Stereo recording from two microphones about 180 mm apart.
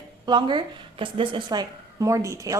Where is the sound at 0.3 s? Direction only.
25° right (ahead or behind).